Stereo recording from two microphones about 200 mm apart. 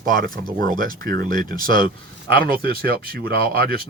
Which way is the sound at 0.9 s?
45° right (ahead or behind).